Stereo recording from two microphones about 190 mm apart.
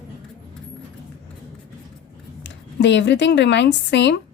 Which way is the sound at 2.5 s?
65° left (ahead or behind).